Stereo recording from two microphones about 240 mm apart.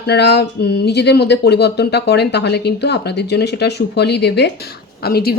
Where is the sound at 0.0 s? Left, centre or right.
Left.